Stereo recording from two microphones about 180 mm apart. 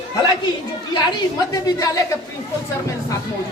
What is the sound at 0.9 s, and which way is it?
A woman's voice, 20° left (ahead or behind).